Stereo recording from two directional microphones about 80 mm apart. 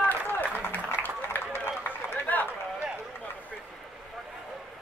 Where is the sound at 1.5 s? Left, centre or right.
Left.